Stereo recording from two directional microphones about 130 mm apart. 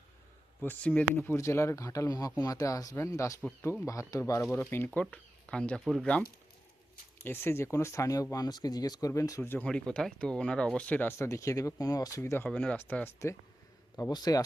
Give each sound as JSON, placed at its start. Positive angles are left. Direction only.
{"t": 0.6, "sound": "speech", "side_deg": 15}
{"t": 7.3, "sound": "speech", "side_deg": 20}
{"t": 9.4, "sound": "speech", "side_deg": 15}
{"t": 12.5, "sound": "speech", "side_deg": 10}
{"t": 14.1, "sound": "speech", "side_deg": 30}